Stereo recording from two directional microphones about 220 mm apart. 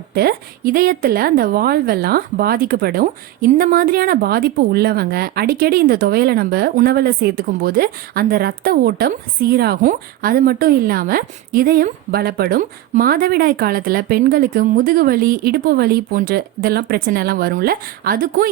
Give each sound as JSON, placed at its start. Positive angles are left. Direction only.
{"t": 0.1, "sound": "speech", "side_deg": -45}